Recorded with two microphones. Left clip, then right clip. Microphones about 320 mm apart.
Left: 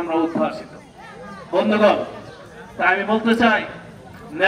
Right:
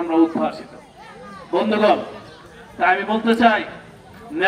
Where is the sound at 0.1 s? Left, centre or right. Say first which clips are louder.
Right 3 dB; right.